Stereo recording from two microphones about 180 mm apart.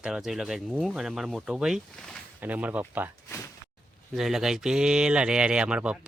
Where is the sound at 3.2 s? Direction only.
15° left (ahead or behind).